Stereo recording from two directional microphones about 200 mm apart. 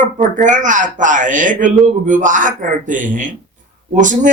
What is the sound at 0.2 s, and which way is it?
A man's voice, 40° right (ahead or behind).